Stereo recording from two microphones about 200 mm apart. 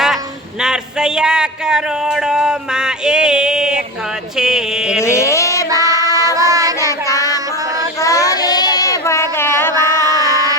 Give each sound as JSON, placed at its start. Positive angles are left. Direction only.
{"t": 0.6, "sound": "speech", "side_deg": -5}
{"t": 4.4, "sound": "mantra", "side_deg": -5}
{"t": 5.0, "sound": "a sound", "side_deg": 15}
{"t": 5.6, "sound": "child singing", "side_deg": -15}
{"t": 6.0, "sound": "child singing", "side_deg": 15}
{"t": 6.3, "sound": "child singing", "side_deg": -15}
{"t": 7.0, "sound": "child singing", "side_deg": 15}
{"t": 9.7, "sound": "a sound", "side_deg": -20}